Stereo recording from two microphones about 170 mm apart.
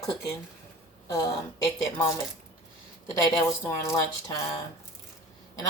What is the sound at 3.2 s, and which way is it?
A woman's voice, 20° left (ahead or behind).